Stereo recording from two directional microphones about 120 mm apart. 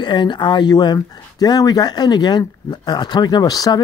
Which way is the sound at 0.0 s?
40° left (ahead or behind).